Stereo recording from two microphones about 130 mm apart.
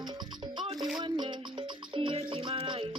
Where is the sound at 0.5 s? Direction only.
35° right (ahead or behind).